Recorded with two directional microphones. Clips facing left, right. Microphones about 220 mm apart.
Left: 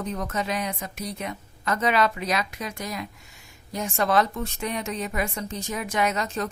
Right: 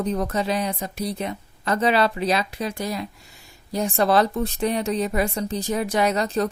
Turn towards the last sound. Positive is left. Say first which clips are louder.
# right 5 dB
turn(degrees=-35)  # may be behind; listen again after turning